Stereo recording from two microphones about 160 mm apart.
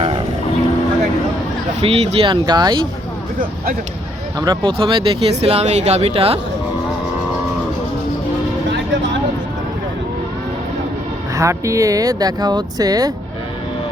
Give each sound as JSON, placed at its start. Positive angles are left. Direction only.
{"t": 1.8, "sound": "speech", "side_deg": -40}
{"t": 4.4, "sound": "speech", "side_deg": -25}
{"t": 11.3, "sound": "speech", "side_deg": -20}